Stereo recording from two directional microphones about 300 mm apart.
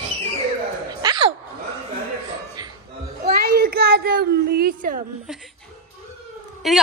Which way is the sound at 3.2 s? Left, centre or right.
Right.